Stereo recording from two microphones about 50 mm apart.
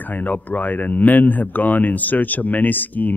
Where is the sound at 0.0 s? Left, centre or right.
Left.